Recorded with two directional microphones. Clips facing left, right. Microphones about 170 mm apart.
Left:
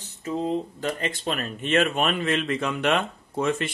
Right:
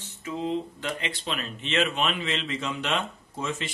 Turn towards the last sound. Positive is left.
turn(degrees=60)  # may be behind; listen again after turning